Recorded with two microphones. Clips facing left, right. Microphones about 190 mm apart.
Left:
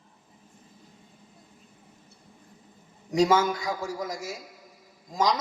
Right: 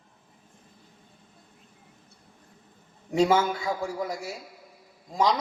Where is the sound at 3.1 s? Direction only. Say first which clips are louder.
Even; 40° left (ahead or behind).